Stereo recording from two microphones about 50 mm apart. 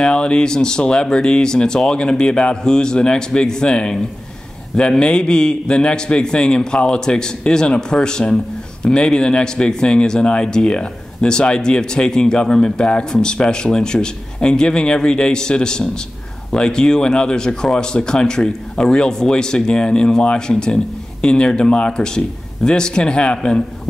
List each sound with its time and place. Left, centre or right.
0.0 s speech: centre